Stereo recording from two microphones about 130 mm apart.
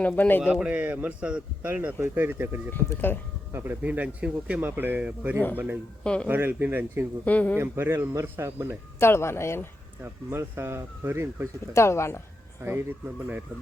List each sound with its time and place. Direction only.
0.0 s speech: 10° left (ahead or behind)
0.5 s a man's voice: 10° right (ahead or behind)
2.7 s speech: 15° left (ahead or behind)
3.5 s a man's voice: 15° right (ahead or behind)
6.0 s speech: 5° left (ahead or behind)
6.2 s a man's voice: 15° right (ahead or behind)
7.3 s speech: 10° left (ahead or behind)
7.5 s speech: 20° right (ahead or behind)
9.0 s speech: 20° left (ahead or behind)
10.0 s a man's voice: 20° right (ahead or behind)
11.7 s speech: 20° left (ahead or behind)
12.6 s a man's voice: 15° right (ahead or behind)